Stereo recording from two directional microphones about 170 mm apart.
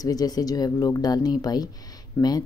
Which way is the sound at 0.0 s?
20° left (ahead or behind).